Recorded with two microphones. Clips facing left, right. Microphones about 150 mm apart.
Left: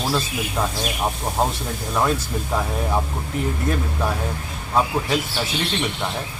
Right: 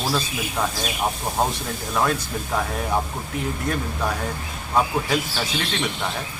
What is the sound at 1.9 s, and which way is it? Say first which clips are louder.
Speech: left 1 dB; 5° left (ahead or behind).